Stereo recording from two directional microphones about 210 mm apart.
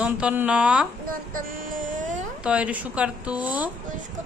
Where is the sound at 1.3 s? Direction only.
40° right (ahead or behind).